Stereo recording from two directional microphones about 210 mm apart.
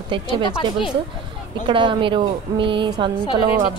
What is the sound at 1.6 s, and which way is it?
A woman's voice, 25° right (ahead or behind).